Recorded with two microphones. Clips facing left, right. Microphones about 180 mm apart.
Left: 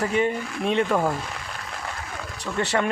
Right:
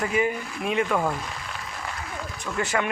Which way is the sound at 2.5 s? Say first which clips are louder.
Left 2 dB; 35° left (ahead or behind).